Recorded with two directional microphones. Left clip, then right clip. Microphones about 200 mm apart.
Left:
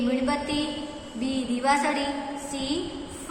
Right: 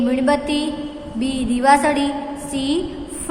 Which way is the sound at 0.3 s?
55° right (ahead or behind).